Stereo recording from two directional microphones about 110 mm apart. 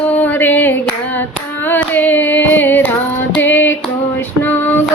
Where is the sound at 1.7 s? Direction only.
15° left (ahead or behind).